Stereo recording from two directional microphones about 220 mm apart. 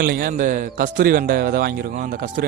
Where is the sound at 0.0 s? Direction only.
40° right (ahead or behind).